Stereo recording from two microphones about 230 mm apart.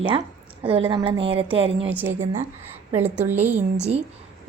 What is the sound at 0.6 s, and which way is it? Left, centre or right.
A woman's voice, right.